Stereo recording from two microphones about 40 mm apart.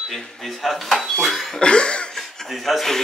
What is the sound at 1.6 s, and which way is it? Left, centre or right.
Cough, left.